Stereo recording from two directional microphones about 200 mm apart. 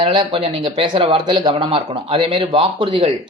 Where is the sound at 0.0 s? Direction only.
25° right (ahead or behind).